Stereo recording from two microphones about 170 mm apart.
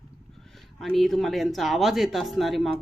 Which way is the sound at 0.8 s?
Centre (ahead or behind).